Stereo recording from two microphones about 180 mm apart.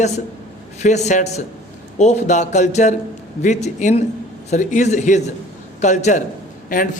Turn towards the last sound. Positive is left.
turn(degrees=45)  # may be behind; listen again after turning